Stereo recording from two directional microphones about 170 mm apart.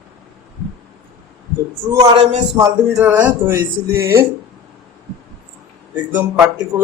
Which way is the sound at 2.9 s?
10° right (ahead or behind).